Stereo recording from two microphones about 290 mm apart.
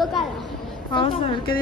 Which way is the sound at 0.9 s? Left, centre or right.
Centre.